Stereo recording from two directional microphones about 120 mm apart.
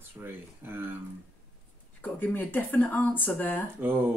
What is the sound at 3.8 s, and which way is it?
Speech, 15° right (ahead or behind).